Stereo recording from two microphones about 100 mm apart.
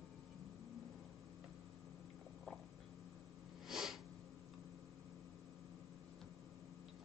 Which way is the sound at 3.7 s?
5° right (ahead or behind).